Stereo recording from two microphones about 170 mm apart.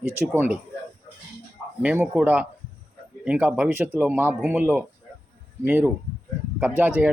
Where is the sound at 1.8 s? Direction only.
10° right (ahead or behind).